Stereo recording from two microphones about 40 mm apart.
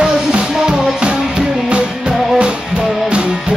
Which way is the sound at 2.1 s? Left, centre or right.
Centre.